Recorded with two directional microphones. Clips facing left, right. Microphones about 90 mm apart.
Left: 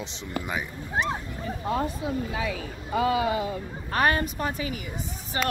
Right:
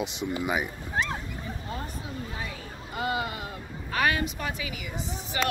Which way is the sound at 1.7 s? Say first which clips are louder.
Left 13 dB; 90° left.